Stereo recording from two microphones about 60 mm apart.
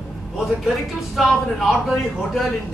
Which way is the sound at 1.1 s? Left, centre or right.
Centre.